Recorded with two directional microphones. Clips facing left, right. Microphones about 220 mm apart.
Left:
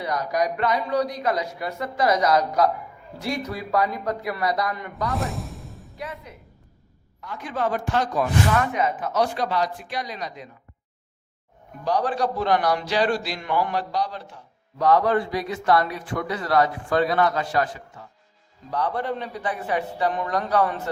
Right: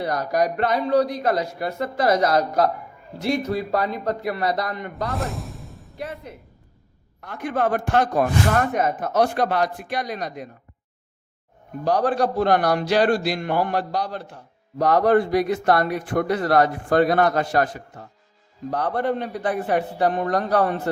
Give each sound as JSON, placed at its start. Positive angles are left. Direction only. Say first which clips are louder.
{"t": 0.2, "sound": "speech", "louder": "right 2 dB", "side_deg": -55}
{"t": 0.6, "sound": "speech", "louder": "right 3 dB", "side_deg": -30}
{"t": 1.5, "sound": "speech", "louder": "right 4 dB", "side_deg": -50}
{"t": 2.0, "sound": "speech", "louder": "right 1 dB", "side_deg": -30}
{"t": 3.7, "sound": "speech", "louder": "right 1 dB", "side_deg": -25}
{"t": 5.1, "sound": "music", "louder": "even", "side_deg": 0}
{"t": 7.2, "sound": "speech", "louder": "right 4 dB", "side_deg": -55}
{"t": 11.9, "sound": "speech", "louder": "right 3 dB", "side_deg": -55}